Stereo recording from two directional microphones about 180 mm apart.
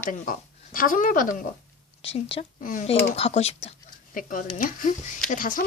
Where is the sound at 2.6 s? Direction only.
50° left (ahead or behind).